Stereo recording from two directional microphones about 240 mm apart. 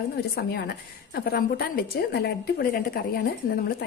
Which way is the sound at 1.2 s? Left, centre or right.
Left.